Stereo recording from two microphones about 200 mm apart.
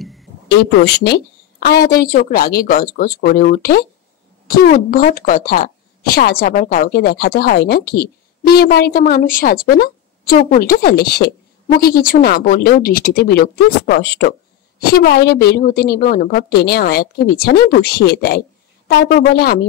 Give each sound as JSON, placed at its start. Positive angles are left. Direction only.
{"t": 0.5, "sound": "a woman's voice", "side_deg": 55}